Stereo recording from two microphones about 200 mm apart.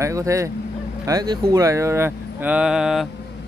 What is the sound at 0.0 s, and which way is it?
Speech, 15° right (ahead or behind).